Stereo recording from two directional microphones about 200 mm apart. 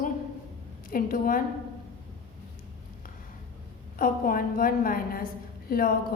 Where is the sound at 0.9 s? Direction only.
45° left (ahead or behind).